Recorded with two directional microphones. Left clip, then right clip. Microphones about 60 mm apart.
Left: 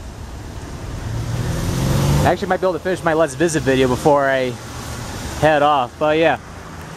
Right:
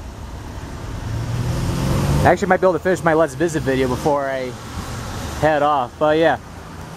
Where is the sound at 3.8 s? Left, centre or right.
Left.